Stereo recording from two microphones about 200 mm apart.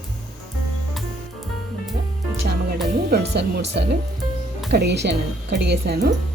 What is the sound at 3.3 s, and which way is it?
Speech, 55° right (ahead or behind).